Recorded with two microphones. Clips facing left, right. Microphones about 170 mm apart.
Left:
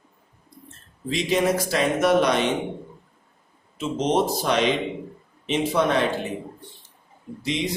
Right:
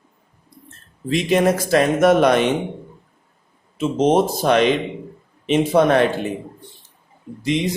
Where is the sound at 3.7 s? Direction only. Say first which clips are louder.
Right 6 dB; 50° right (ahead or behind).